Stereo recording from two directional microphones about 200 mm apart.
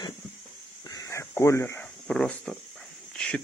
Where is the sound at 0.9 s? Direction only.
15° left (ahead or behind).